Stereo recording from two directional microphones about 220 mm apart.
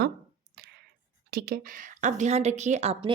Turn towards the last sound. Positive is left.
turn(degrees=-30)  # may be behind; listen again after turning